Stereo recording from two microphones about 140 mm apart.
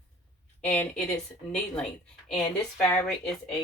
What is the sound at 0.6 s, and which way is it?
Speech, 10° left (ahead or behind).